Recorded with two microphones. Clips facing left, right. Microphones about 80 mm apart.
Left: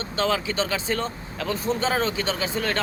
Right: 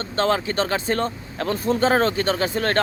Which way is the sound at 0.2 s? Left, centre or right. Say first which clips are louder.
Right 3 dB; right.